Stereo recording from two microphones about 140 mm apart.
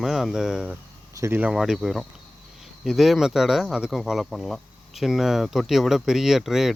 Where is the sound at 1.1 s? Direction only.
15° right (ahead or behind).